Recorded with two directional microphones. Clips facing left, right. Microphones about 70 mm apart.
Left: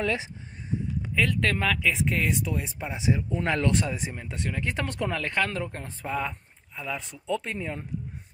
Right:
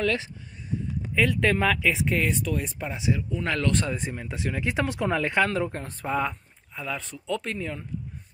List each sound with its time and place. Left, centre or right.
0.0 s speech: centre
1.1 s speech: centre
2.9 s speech: left
3.4 s speech: left
3.8 s speech: centre
5.5 s speech: centre